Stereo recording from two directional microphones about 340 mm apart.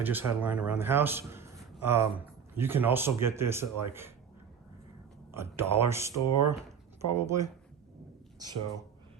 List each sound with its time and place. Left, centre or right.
0.0 s a man's voice: centre
5.3 s a man's voice: centre